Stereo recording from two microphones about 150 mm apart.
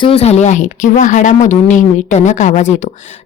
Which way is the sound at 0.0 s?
45° left (ahead or behind).